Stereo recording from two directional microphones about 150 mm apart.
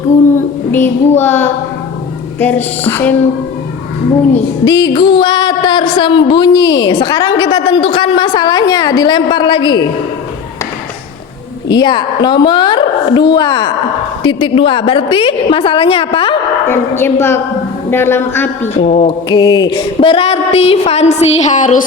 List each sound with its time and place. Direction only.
0.3 s child singing: 15° left (ahead or behind)
2.4 s a man's voice: 10° left (ahead or behind)
4.6 s a woman's voice: 25° left (ahead or behind)
11.7 s a woman's voice: 30° left (ahead or behind)
16.6 s a man's voice: 15° left (ahead or behind)
19.0 s a sound: 30° left (ahead or behind); by 21.8 s 55° left (ahead or behind)